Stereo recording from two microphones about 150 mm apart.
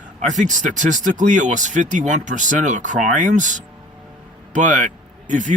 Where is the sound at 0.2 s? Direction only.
55° right (ahead or behind).